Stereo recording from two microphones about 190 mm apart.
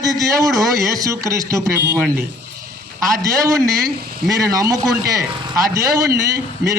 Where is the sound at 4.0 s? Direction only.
50° right (ahead or behind).